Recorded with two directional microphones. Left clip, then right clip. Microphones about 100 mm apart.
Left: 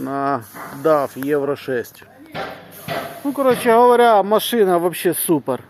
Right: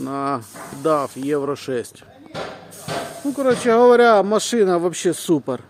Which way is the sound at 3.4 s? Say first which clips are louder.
Left 1 dB; 20° right (ahead or behind).